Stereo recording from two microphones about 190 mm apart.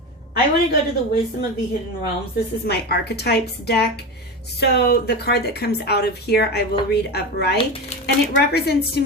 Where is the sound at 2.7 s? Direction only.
60° left (ahead or behind).